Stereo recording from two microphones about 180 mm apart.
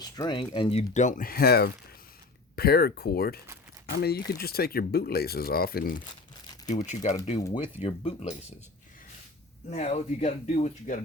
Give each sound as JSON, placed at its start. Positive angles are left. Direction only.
{"t": 0.0, "sound": "speech", "side_deg": 25}
{"t": 0.8, "sound": "speech", "side_deg": 45}
{"t": 6.7, "sound": "speech", "side_deg": 40}
{"t": 9.6, "sound": "speech", "side_deg": 35}